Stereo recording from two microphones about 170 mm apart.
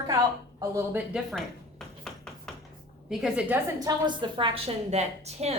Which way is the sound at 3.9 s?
25° right (ahead or behind).